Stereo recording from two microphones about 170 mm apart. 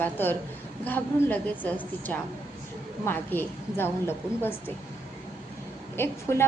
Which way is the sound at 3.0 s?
15° left (ahead or behind).